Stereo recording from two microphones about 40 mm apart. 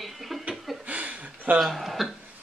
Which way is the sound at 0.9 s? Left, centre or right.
Right.